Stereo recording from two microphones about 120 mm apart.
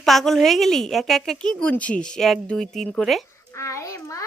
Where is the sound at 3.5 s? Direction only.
25° left (ahead or behind).